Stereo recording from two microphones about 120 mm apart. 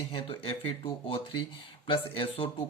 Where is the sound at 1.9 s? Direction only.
50° left (ahead or behind).